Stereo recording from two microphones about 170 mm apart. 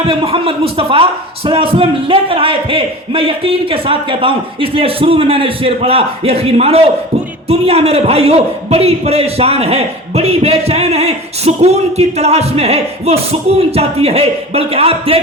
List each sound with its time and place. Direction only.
0.1 s a man's voice: 35° right (ahead or behind)